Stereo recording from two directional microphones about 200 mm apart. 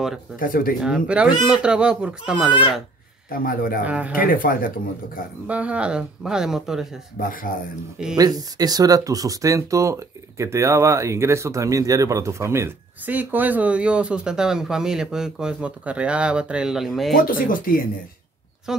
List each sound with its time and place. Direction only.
0.4 s speech: 45° left (ahead or behind)
0.7 s speech: 5° right (ahead or behind)
3.3 s speech: 45° left (ahead or behind)
3.8 s speech: 5° right (ahead or behind)
4.2 s speech: 45° left (ahead or behind)
5.5 s speech: 5° right (ahead or behind)
7.2 s speech: 45° left (ahead or behind)
8.2 s speech: 20° right (ahead or behind); by 17.2 s centre (ahead or behind)
17.2 s speech: 45° left (ahead or behind)
18.7 s speech: centre (ahead or behind)